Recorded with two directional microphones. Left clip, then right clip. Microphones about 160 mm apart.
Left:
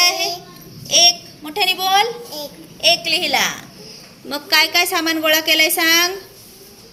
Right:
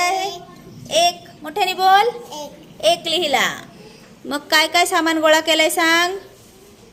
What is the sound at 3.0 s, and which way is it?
A woman's voice, 30° right (ahead or behind).